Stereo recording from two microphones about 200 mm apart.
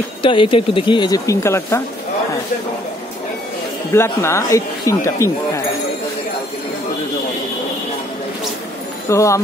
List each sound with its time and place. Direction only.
0.2 s speech: 25° left (ahead or behind)
3.9 s speech: 15° left (ahead or behind)
9.1 s speech: 15° left (ahead or behind)